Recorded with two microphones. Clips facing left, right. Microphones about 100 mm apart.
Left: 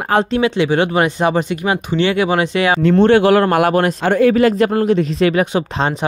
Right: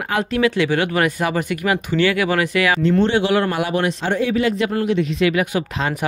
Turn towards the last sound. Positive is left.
turn(degrees=30)  # may be behind; listen again after turning